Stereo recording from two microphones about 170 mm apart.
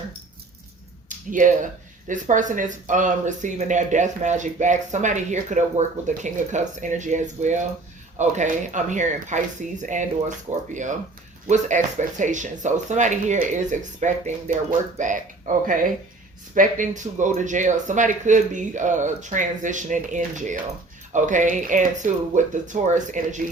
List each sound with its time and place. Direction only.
1.0 s speech: 50° right (ahead or behind)
11.4 s speech: 45° right (ahead or behind)